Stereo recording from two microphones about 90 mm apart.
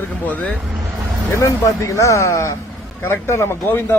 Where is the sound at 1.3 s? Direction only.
35° left (ahead or behind).